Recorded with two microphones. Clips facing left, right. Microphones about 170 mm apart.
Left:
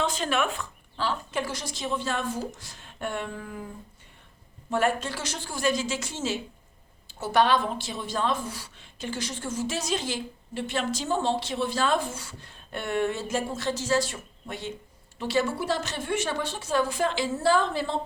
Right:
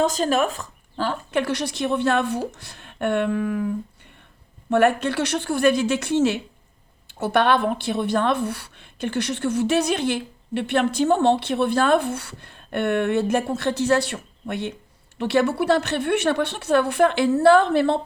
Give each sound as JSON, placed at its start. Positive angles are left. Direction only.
{"t": 0.0, "sound": "a woman's voice", "side_deg": -40}
{"t": 4.7, "sound": "a woman's voice", "side_deg": -65}